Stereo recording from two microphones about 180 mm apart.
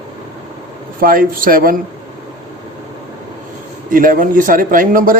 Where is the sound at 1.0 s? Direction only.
50° right (ahead or behind).